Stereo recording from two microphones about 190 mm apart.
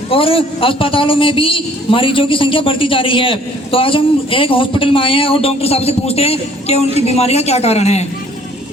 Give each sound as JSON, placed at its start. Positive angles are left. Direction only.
{"t": 0.1, "sound": "a man's voice", "side_deg": 30}